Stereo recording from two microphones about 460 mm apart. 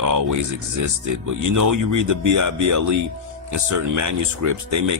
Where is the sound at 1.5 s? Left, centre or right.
Right.